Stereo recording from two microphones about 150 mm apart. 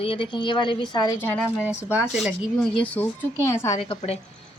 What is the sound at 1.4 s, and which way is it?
Speech, 10° right (ahead or behind).